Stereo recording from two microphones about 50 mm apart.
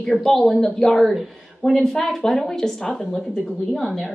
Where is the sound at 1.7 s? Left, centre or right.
Centre.